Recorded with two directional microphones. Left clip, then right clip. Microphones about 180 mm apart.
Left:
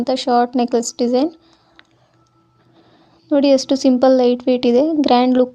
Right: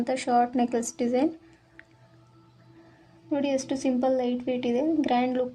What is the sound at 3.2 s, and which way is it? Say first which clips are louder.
A woman's voice: left 13 dB; 40° left (ahead or behind).